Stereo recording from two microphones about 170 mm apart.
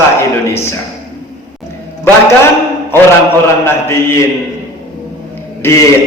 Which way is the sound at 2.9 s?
15° left (ahead or behind).